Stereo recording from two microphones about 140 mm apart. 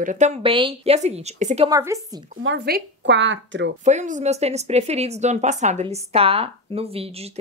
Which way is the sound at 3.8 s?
60° right (ahead or behind).